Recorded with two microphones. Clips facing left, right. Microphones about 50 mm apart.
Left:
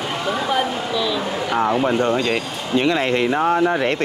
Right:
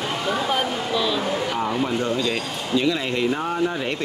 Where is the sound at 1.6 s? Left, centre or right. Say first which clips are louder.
Left 5 dB; left.